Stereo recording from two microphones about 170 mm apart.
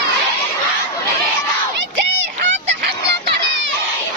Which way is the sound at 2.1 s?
90° right.